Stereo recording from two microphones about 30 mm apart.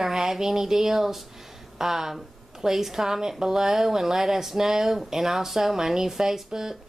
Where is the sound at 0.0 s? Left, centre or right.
Centre.